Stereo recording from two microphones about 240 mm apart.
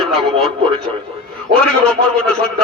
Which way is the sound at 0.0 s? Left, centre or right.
Centre.